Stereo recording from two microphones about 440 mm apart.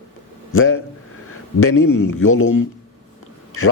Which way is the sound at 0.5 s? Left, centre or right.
Left.